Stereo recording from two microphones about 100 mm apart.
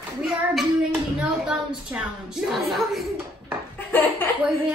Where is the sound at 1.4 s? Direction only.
10° right (ahead or behind).